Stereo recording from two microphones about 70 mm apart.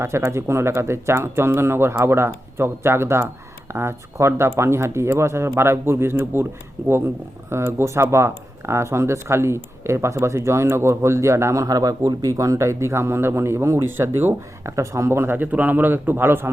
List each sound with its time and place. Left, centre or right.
0.3 s speech: right
11.6 s speech: right
14.6 s speech: right